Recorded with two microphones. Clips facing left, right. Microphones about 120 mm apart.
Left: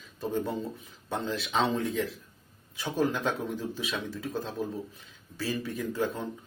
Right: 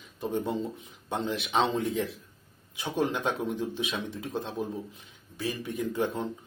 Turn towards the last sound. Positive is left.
turn(degrees=-25)  # may be behind; listen again after turning